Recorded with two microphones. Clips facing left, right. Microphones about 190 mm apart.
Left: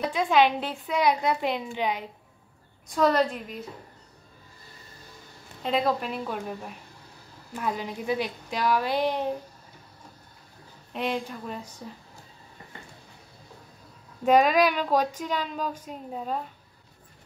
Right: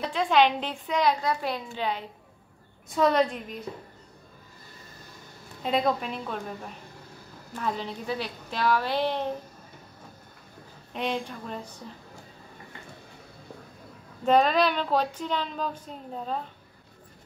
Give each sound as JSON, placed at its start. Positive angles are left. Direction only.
{"t": 0.1, "sound": "speech", "side_deg": 10}
{"t": 1.2, "sound": "speech", "side_deg": 20}
{"t": 2.9, "sound": "a woman's voice", "side_deg": 0}
{"t": 5.6, "sound": "a woman's voice", "side_deg": 0}
{"t": 7.5, "sound": "speech", "side_deg": 10}
{"t": 10.9, "sound": "a woman's voice", "side_deg": 5}
{"t": 14.2, "sound": "speech", "side_deg": 10}